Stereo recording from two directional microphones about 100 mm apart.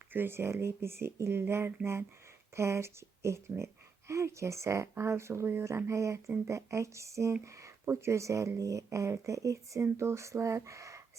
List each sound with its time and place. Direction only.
0.1 s speech: 20° right (ahead or behind)